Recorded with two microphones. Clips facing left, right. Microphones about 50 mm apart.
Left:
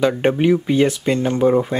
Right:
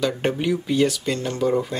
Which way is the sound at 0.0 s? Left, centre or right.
Left.